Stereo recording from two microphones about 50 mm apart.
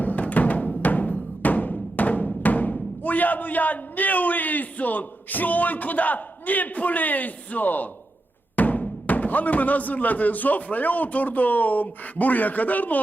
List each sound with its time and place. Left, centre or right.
0.0 s music: left
8.5 s speech: left